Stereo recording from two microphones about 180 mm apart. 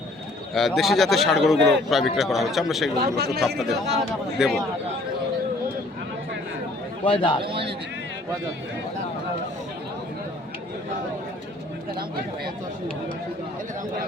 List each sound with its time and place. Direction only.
0.5 s a man's voice: centre (ahead or behind)
3.0 s speech: 60° right (ahead or behind)
4.4 s a man's voice: centre (ahead or behind)
7.0 s a man's voice: 30° left (ahead or behind)